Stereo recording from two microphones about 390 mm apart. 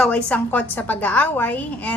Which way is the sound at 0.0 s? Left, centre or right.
Centre.